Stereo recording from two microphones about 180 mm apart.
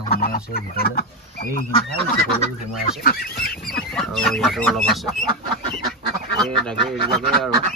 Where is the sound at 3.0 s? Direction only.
55° left (ahead or behind).